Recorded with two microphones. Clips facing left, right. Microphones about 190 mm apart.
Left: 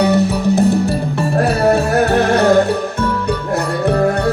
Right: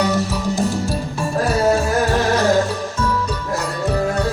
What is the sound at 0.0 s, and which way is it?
Music, 65° left (ahead or behind).